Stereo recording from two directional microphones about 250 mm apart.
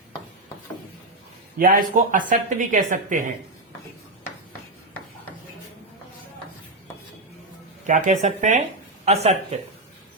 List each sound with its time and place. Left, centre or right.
1.5 s speech: right
7.9 s speech: right